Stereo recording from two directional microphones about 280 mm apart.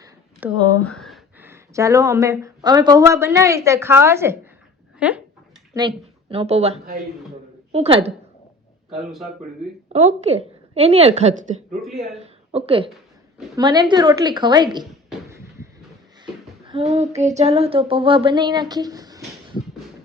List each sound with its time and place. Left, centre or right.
0.0 s a sound: centre
0.9 s speech: centre
5.7 s a woman's voice: centre
8.9 s speech: centre
9.9 s a woman's voice: right
11.8 s speech: centre
12.1 s a woman's voice: right
15.3 s a sound: centre
17.2 s a woman's voice: right